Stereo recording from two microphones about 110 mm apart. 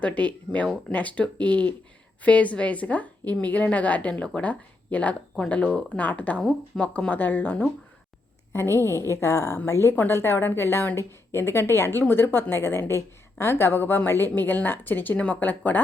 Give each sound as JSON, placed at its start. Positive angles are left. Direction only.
{"t": 0.0, "sound": "a woman's voice", "side_deg": 15}